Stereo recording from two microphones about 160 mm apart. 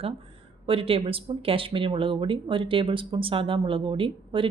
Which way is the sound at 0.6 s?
35° right (ahead or behind).